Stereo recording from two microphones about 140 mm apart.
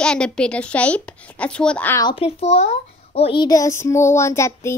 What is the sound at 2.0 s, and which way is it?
Child singing, 35° left (ahead or behind).